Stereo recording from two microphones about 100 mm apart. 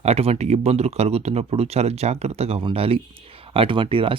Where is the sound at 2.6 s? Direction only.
70° right (ahead or behind).